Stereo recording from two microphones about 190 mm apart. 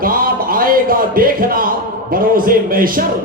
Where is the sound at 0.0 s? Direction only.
50° right (ahead or behind).